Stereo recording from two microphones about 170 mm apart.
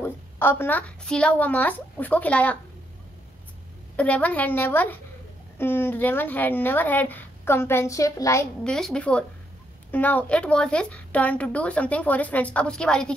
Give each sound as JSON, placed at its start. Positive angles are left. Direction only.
{"t": 0.0, "sound": "a woman's voice", "side_deg": 15}
{"t": 3.9, "sound": "a woman's voice", "side_deg": 10}
{"t": 8.6, "sound": "a woman's voice", "side_deg": 5}